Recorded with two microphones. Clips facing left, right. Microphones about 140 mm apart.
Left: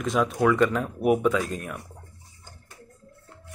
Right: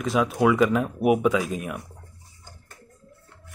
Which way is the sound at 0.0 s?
5° right (ahead or behind).